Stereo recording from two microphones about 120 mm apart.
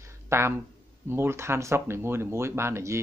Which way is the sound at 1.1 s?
20° right (ahead or behind).